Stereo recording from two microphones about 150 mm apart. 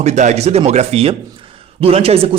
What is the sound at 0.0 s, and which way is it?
A man's voice, 50° right (ahead or behind).